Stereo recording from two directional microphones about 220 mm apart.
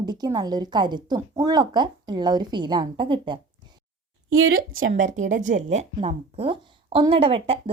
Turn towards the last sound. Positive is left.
turn(degrees=-25)  # may be behind; listen again after turning